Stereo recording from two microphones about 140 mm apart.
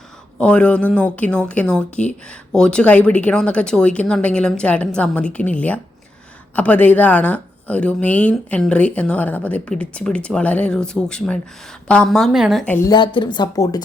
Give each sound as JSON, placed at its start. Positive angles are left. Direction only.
{"t": 0.3, "sound": "a woman's voice", "side_deg": 10}
{"t": 12.6, "sound": "speech", "side_deg": 15}
{"t": 12.9, "sound": "speech", "side_deg": 35}